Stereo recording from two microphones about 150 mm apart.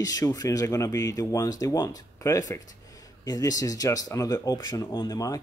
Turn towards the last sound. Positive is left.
turn(degrees=25)  # may be behind; listen again after turning